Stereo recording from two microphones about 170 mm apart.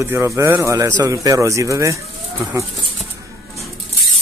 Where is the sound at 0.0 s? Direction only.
15° right (ahead or behind).